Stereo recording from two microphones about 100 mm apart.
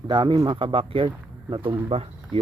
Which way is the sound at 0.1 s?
50° right (ahead or behind).